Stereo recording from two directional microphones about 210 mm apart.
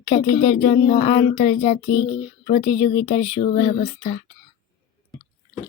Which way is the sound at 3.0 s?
30° left (ahead or behind).